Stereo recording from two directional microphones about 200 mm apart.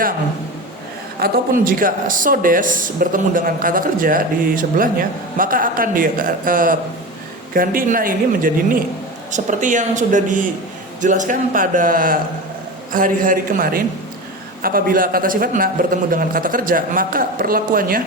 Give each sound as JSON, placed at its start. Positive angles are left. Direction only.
{"t": 1.2, "sound": "speech", "side_deg": -45}